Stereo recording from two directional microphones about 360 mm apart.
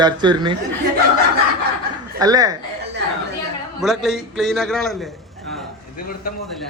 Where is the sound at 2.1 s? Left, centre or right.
Centre.